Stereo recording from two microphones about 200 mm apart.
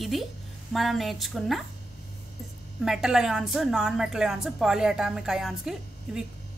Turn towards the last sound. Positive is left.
turn(degrees=0)  # may be behind; listen again after turning